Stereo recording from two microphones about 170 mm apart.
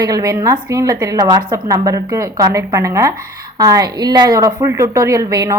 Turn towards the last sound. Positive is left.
turn(degrees=-20)  # may be behind; listen again after turning